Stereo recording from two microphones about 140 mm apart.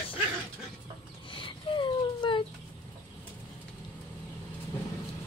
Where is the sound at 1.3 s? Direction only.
35° left (ahead or behind).